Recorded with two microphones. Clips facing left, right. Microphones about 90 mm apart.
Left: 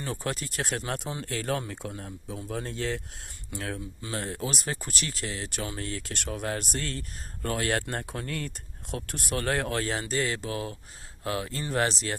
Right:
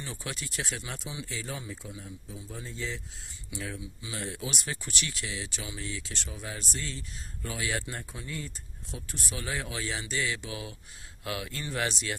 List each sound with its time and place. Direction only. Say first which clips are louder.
0.0 s speech: left 7 dB; 50° left (ahead or behind); by 3.0 s 65° left (ahead or behind)
3.5 s speech: left 3 dB; 50° left (ahead or behind)